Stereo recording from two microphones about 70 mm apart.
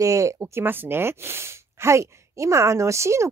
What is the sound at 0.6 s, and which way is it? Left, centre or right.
Speech, right.